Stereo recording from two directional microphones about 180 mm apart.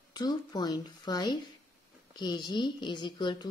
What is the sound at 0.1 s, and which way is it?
A woman's voice, 20° left (ahead or behind).